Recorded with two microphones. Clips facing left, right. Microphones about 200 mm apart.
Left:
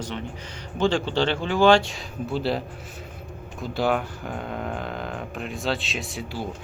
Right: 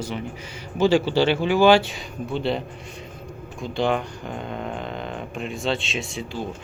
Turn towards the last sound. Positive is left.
turn(degrees=0)  # may be behind; listen again after turning